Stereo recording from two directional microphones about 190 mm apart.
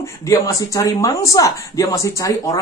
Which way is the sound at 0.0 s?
15° left (ahead or behind).